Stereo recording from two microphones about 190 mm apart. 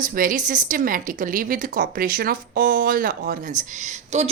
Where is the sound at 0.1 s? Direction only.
45° right (ahead or behind).